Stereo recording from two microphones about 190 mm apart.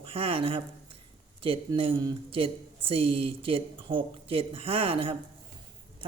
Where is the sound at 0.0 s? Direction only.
30° right (ahead or behind).